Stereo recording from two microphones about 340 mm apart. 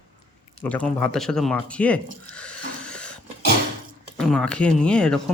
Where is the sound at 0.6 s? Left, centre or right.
Centre.